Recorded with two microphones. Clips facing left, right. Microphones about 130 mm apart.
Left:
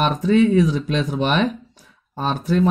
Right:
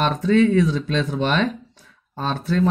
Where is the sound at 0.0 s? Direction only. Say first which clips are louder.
Left 1 dB; 15° left (ahead or behind).